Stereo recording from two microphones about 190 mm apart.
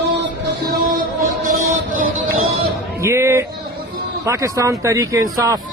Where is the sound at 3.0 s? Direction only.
15° right (ahead or behind).